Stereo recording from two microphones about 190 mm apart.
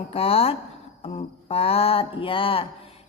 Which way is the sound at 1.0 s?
30° left (ahead or behind).